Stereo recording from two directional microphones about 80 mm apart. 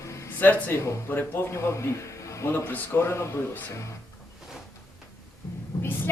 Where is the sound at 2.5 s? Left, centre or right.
Left.